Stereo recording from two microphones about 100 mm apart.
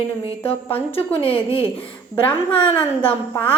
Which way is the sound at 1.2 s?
70° left (ahead or behind).